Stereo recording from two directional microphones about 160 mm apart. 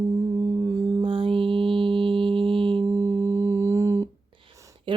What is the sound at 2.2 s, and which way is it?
Mantra, 35° right (ahead or behind).